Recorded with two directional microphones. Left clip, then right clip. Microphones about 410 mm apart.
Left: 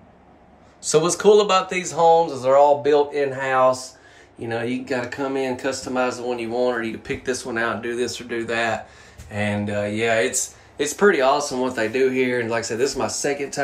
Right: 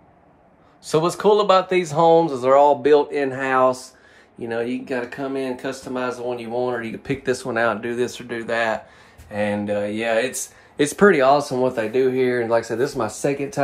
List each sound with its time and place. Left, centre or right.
0.8 s speech: centre